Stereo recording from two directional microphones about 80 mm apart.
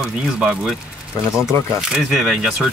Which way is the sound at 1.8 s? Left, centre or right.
Centre.